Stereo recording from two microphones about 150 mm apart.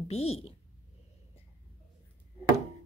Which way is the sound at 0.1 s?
45° left (ahead or behind).